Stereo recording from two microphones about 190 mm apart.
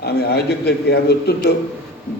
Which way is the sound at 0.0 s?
60° left (ahead or behind).